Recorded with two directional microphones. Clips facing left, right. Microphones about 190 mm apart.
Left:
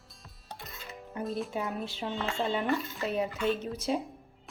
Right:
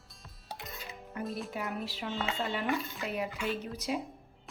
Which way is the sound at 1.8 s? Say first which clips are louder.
Left 2 dB; 25° left (ahead or behind).